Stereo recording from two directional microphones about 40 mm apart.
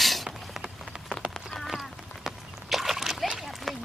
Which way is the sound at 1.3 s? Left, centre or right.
Centre.